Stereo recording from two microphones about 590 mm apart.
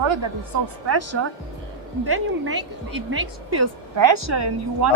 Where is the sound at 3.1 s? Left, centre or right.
Right.